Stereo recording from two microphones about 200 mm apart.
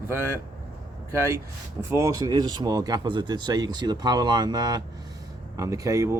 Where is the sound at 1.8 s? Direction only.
15° right (ahead or behind).